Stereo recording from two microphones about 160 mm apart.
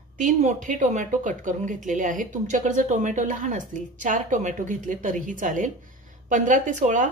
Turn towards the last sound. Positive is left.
turn(degrees=-50)  # may be behind; listen again after turning